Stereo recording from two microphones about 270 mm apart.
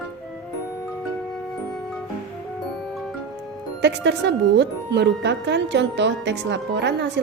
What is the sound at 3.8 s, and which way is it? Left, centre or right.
Speech, right.